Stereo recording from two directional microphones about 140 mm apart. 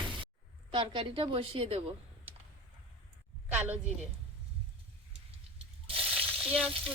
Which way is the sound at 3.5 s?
10° right (ahead or behind).